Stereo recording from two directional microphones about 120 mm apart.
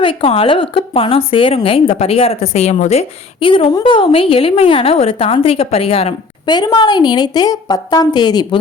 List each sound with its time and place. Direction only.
0.0 s a woman's voice: 50° left (ahead or behind); by 3.1 s 65° left (ahead or behind)
3.4 s a woman's voice: 45° left (ahead or behind)
6.4 s a woman's voice: 35° left (ahead or behind)